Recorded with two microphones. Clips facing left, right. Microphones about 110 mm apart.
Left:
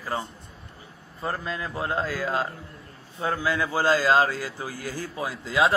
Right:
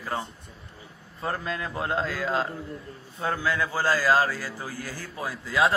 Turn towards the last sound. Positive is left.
turn(degrees=15)  # may be behind; listen again after turning